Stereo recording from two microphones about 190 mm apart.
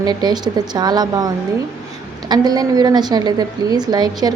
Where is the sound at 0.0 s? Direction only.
20° right (ahead or behind).